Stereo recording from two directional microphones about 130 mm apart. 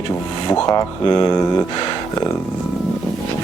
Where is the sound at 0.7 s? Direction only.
35° left (ahead or behind).